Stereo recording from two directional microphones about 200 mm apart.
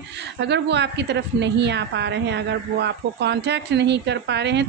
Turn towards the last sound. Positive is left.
turn(degrees=-60)  # may be behind; listen again after turning